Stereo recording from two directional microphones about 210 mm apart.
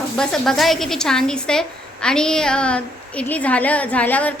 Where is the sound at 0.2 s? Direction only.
5° left (ahead or behind).